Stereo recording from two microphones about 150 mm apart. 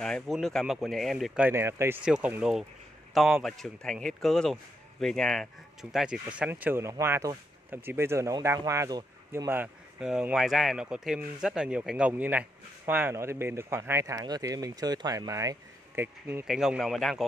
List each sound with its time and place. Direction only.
0.0 s speech: centre (ahead or behind)
1.5 s speech: 15° right (ahead or behind)
9.5 s speech: 10° right (ahead or behind)
16.4 s speech: 5° right (ahead or behind)